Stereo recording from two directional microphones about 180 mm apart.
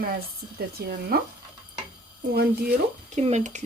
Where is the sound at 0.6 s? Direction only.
60° right (ahead or behind).